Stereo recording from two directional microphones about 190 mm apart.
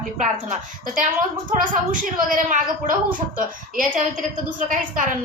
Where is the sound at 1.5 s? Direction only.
45° right (ahead or behind).